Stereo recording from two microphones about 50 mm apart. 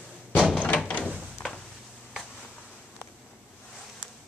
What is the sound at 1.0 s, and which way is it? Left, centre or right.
Door, centre.